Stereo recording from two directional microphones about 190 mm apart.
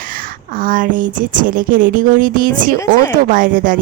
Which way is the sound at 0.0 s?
50° right (ahead or behind).